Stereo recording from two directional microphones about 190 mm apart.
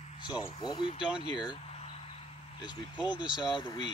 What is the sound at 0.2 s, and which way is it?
Speech, 25° left (ahead or behind).